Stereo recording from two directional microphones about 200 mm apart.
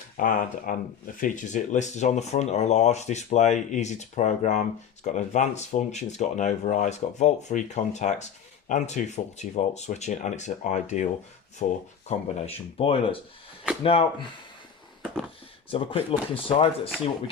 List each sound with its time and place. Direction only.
0.2 s speech: 45° left (ahead or behind); by 14.3 s 25° left (ahead or behind)
15.7 s speech: 25° left (ahead or behind)